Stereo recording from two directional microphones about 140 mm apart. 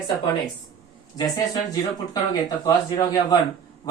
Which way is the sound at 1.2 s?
30° left (ahead or behind).